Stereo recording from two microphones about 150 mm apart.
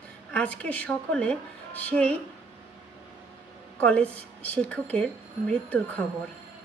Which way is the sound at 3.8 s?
10° left (ahead or behind).